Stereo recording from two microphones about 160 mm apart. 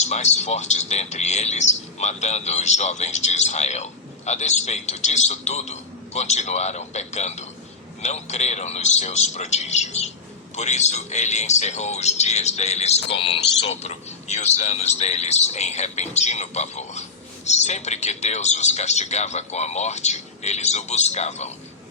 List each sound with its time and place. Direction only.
0.0 s a man's voice: 45° left (ahead or behind)